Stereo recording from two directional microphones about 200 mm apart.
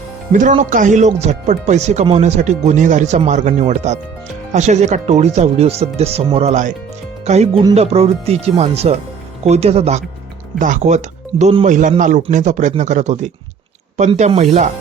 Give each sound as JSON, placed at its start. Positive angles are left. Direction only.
{"t": 0.3, "sound": "speech", "side_deg": -40}